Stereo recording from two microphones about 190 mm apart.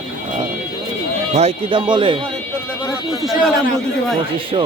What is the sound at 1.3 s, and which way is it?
Speech, 35° right (ahead or behind).